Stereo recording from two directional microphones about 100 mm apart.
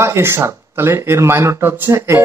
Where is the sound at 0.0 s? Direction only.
25° right (ahead or behind).